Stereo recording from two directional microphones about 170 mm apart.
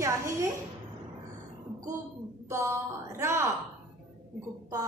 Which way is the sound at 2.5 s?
15° right (ahead or behind).